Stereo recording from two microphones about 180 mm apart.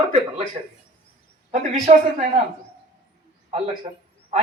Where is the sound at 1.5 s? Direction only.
45° right (ahead or behind).